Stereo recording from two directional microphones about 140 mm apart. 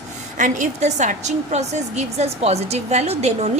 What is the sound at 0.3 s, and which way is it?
A woman's voice, 65° right (ahead or behind).